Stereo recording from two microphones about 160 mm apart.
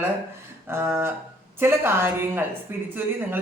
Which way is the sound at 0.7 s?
15° right (ahead or behind).